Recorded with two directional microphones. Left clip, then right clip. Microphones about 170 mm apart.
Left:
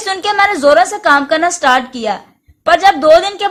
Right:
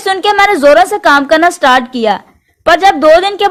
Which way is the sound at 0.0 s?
40° right (ahead or behind).